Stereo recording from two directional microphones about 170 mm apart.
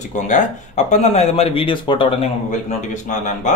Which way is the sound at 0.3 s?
45° left (ahead or behind).